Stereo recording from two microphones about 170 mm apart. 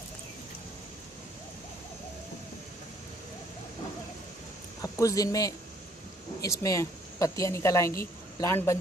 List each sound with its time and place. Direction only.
4.8 s speech: 20° left (ahead or behind)